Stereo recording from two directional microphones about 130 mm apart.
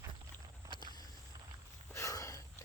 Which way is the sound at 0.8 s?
35° left (ahead or behind).